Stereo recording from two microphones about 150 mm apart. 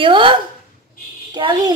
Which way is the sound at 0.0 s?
35° right (ahead or behind).